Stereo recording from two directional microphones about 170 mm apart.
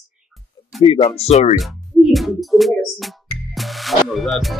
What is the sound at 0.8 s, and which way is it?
Speech, 35° left (ahead or behind).